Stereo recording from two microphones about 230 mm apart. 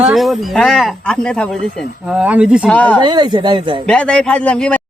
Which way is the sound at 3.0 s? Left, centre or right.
Centre.